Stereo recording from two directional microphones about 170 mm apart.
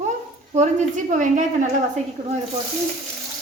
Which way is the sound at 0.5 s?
45° right (ahead or behind).